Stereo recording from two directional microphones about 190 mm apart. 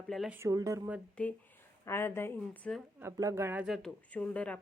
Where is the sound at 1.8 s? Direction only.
15° left (ahead or behind).